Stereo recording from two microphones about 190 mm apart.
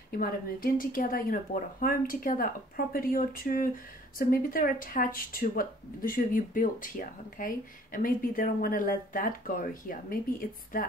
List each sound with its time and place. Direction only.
0.1 s speech: 50° left (ahead or behind)